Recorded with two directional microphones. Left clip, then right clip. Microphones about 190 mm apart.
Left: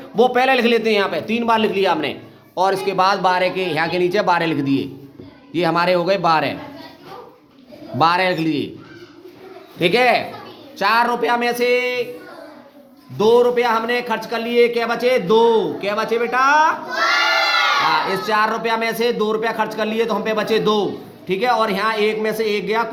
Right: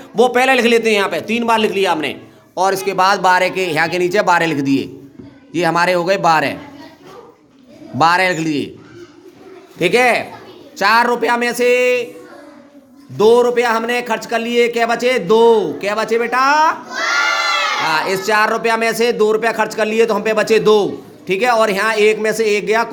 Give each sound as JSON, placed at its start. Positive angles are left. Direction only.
{"t": 0.2, "sound": "a man's voice", "side_deg": -15}
{"t": 7.9, "sound": "a man's voice", "side_deg": -15}
{"t": 9.7, "sound": "a man's voice", "side_deg": -15}
{"t": 10.8, "sound": "a man's voice", "side_deg": -25}
{"t": 13.1, "sound": "a man's voice", "side_deg": -25}
{"t": 17.9, "sound": "a man's voice", "side_deg": -25}